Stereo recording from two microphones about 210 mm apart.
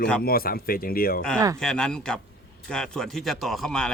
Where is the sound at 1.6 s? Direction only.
5° left (ahead or behind).